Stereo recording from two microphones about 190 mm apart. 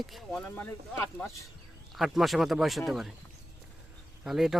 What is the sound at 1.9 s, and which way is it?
Speech, centre (ahead or behind).